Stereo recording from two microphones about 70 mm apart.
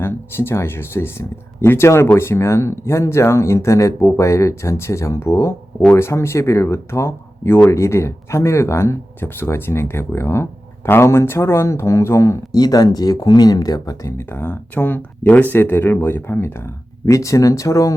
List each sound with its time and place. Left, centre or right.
0.0 s speech: left
12.5 s speech: left
14.2 s speech: left